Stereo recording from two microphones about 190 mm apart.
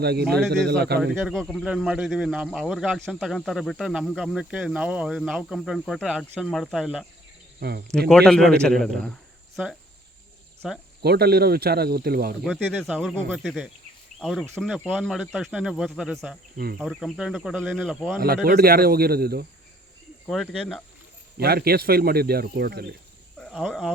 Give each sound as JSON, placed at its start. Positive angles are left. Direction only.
{"t": 0.0, "sound": "speech", "side_deg": -60}
{"t": 1.2, "sound": "speech", "side_deg": 0}
{"t": 7.6, "sound": "speech", "side_deg": -60}
{"t": 7.9, "sound": "speech", "side_deg": 5}
{"t": 10.6, "sound": "speech", "side_deg": -5}
{"t": 11.0, "sound": "speech", "side_deg": -55}
{"t": 12.5, "sound": "speech", "side_deg": 5}
{"t": 18.4, "sound": "speech", "side_deg": -55}
{"t": 20.2, "sound": "speech", "side_deg": 0}
{"t": 21.3, "sound": "speech", "side_deg": -55}
{"t": 23.4, "sound": "speech", "side_deg": 5}